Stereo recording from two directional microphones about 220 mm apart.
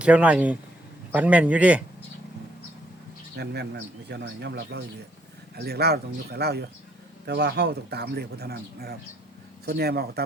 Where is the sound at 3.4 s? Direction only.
50° right (ahead or behind).